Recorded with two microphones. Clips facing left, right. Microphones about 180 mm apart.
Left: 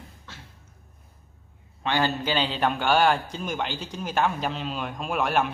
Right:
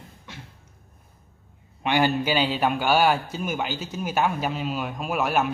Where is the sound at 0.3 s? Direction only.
15° right (ahead or behind).